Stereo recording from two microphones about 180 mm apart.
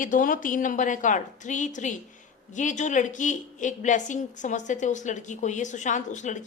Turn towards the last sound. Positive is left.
turn(degrees=40)  # may be behind; listen again after turning